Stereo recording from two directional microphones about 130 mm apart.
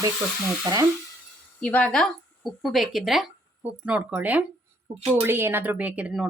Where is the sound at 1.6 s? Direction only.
10° left (ahead or behind).